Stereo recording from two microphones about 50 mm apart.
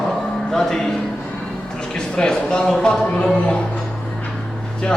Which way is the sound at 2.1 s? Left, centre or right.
Centre.